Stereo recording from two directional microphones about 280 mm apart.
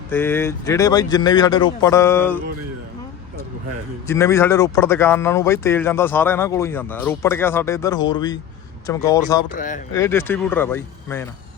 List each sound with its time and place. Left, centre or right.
0.1 s speech: centre
4.0 s speech: centre
9.6 s speech: left
9.9 s speech: centre